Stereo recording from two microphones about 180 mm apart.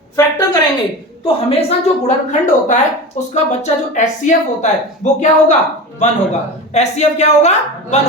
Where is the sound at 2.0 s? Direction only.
45° left (ahead or behind).